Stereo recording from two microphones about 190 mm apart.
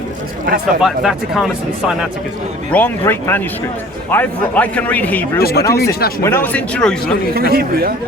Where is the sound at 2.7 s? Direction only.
10° left (ahead or behind).